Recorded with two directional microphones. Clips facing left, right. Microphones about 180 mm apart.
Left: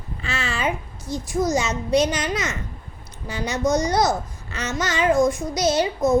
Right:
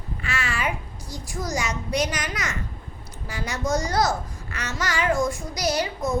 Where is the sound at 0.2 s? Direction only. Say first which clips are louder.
Left 2 dB; 25° left (ahead or behind).